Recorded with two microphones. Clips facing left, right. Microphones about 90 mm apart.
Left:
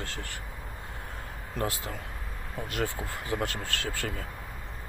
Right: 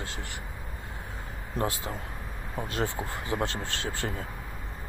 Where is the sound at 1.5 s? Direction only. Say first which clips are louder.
Right 2 dB; 25° right (ahead or behind).